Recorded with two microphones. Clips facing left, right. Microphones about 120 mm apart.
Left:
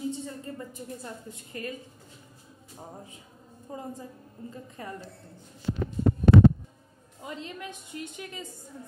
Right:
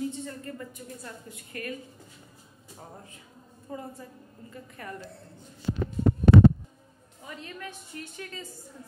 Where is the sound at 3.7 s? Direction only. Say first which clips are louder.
Left 1 dB; 20° left (ahead or behind).